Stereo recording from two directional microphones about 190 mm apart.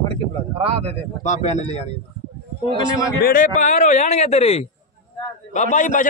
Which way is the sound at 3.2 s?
50° left (ahead or behind).